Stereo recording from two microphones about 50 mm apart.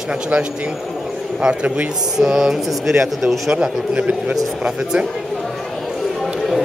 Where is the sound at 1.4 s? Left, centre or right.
Right.